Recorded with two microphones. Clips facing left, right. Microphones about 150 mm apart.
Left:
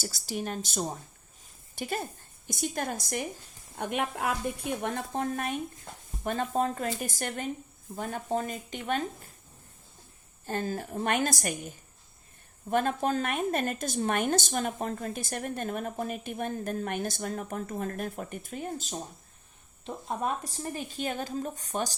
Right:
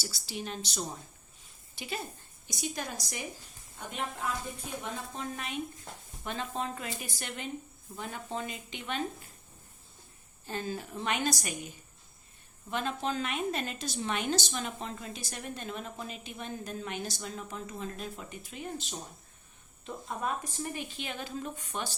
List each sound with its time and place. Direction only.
0.0 s a woman's voice: 50° left (ahead or behind)
3.8 s a woman's voice: 65° left (ahead or behind); by 9.0 s 45° left (ahead or behind)
10.4 s a woman's voice: 45° left (ahead or behind)
12.7 s a woman's voice: 50° left (ahead or behind)
20.1 s a woman's voice: 45° left (ahead or behind)